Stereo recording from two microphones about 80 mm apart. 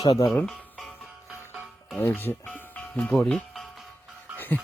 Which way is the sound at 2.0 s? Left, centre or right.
Left.